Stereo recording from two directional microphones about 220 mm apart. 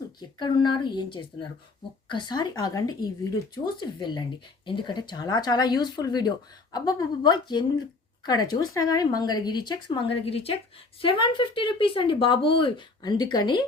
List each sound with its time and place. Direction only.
0.2 s speech: 20° left (ahead or behind)